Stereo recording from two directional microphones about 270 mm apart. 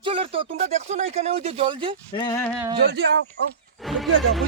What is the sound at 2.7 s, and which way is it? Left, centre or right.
Speech, right.